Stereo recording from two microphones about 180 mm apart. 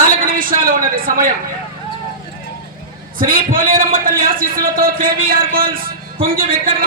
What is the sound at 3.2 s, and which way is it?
A man's voice, 50° right (ahead or behind).